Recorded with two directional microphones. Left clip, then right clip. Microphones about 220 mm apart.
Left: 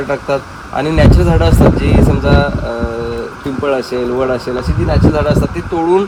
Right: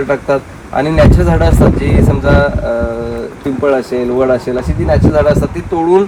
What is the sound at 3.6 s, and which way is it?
Speech, 10° left (ahead or behind).